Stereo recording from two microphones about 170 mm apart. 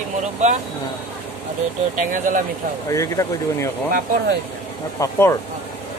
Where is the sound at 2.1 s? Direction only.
50° right (ahead or behind).